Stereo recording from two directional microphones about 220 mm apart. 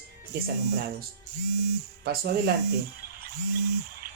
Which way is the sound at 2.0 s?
45° right (ahead or behind).